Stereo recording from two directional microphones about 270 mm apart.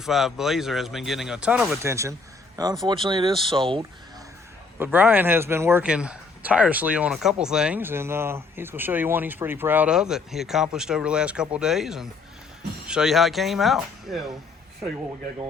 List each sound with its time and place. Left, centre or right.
0.0 s speech: centre
4.8 s speech: centre